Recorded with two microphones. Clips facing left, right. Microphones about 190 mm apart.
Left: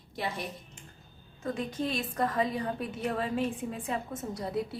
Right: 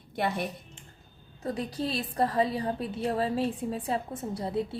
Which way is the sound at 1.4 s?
35° right (ahead or behind).